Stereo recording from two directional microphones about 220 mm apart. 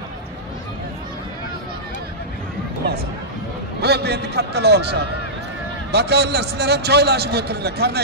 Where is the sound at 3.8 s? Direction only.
50° right (ahead or behind).